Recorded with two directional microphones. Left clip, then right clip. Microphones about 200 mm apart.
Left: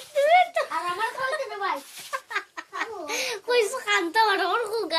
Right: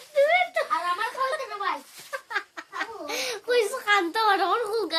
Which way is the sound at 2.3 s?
20° right (ahead or behind).